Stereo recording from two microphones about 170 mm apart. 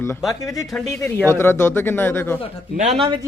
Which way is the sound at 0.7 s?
Centre (ahead or behind).